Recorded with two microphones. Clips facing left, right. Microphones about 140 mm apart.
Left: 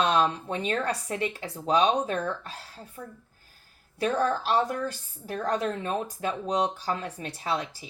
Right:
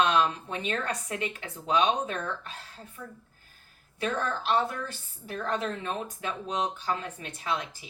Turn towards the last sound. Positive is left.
turn(degrees=35)  # may be behind; listen again after turning